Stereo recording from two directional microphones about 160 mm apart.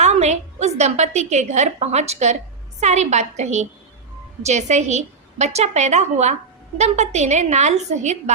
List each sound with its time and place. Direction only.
0.0 s a woman's voice: 45° right (ahead or behind)